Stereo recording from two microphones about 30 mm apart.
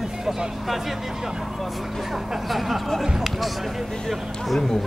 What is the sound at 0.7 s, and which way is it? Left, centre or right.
Speech, centre.